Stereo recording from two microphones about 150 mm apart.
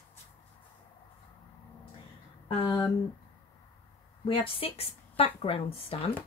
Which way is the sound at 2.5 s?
35° left (ahead or behind).